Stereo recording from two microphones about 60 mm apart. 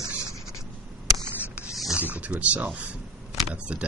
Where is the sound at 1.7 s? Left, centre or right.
Centre.